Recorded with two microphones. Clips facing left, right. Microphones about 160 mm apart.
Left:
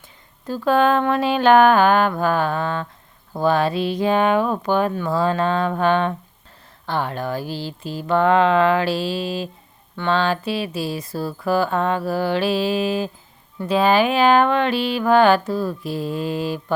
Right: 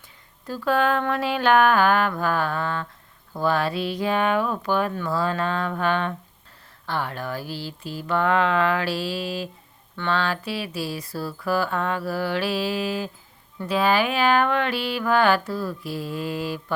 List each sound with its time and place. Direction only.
0.4 s speech: 25° left (ahead or behind)